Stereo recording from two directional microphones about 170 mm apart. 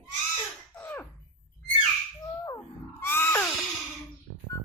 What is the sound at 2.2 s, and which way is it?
Bird, 20° left (ahead or behind).